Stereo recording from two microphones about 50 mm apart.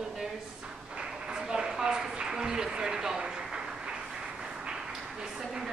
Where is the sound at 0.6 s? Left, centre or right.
Centre.